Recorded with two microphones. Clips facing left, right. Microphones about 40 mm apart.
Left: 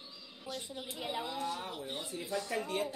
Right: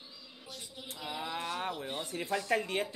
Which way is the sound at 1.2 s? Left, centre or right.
Right.